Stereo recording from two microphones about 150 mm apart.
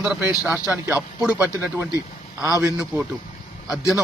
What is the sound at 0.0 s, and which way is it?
A man's voice, 10° right (ahead or behind).